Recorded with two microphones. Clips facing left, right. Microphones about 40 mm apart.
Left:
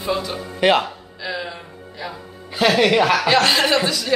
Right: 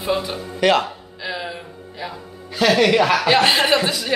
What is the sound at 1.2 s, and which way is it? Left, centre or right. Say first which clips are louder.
Music: even; centre.